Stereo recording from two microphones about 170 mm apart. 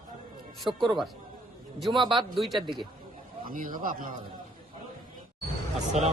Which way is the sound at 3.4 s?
55° right (ahead or behind).